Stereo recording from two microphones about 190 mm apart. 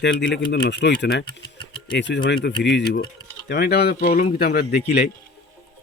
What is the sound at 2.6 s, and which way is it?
Speech, 65° left (ahead or behind).